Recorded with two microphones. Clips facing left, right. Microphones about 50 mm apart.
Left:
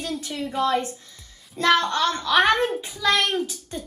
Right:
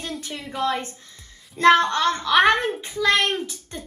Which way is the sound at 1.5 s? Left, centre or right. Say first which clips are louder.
Right 4 dB; right.